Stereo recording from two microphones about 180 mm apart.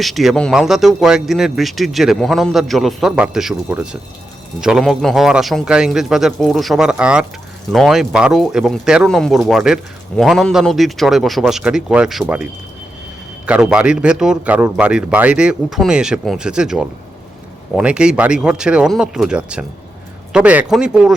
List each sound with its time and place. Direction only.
0.0 s speech: centre (ahead or behind)